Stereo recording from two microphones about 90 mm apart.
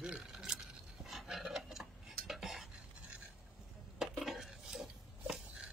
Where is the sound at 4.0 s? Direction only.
5° right (ahead or behind).